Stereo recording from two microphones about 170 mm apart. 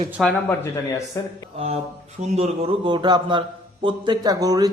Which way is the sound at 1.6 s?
35° right (ahead or behind).